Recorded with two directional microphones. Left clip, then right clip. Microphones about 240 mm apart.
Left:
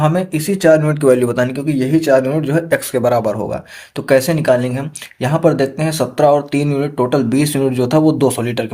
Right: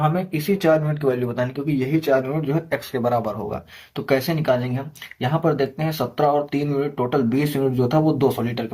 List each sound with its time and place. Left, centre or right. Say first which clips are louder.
0.0 s speech: left 6 dB; left